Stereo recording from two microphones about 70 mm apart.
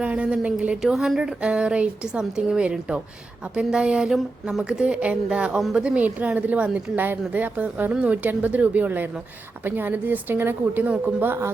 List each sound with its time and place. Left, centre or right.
0.0 s speech: centre
0.8 s speech: centre
1.4 s speech: centre; by 11.5 s right